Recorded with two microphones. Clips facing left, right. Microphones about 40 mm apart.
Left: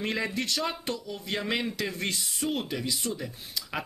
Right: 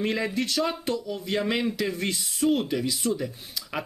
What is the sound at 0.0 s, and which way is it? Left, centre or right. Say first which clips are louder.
Speech: right 3 dB; centre.